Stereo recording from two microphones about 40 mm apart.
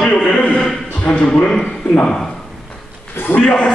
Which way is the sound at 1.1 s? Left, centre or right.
Left.